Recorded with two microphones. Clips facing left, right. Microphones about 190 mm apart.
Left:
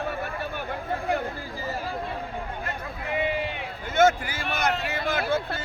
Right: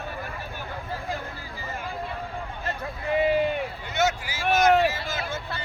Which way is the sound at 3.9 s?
55° left (ahead or behind).